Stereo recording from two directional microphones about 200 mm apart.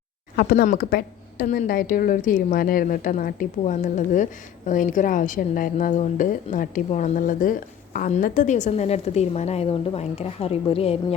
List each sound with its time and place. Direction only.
0.3 s a woman's voice: 45° left (ahead or behind); by 10.9 s 30° left (ahead or behind)